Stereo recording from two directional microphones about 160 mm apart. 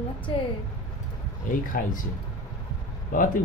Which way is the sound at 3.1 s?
55° left (ahead or behind).